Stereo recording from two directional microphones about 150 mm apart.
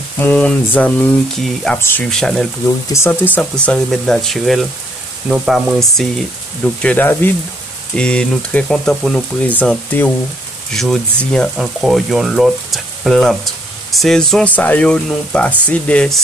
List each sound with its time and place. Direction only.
0.2 s speech: 10° left (ahead or behind)
1.8 s speech: 15° left (ahead or behind)
2.0 s speech: 5° left (ahead or behind)
2.6 s speech: 20° left (ahead or behind)